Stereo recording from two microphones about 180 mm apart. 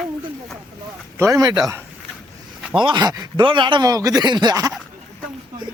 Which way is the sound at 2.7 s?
25° right (ahead or behind).